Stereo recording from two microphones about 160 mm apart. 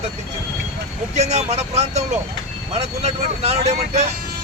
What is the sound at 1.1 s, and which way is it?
Speech, 45° right (ahead or behind).